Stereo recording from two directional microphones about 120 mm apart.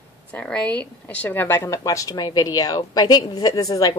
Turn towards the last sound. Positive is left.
turn(degrees=30)  # may be behind; listen again after turning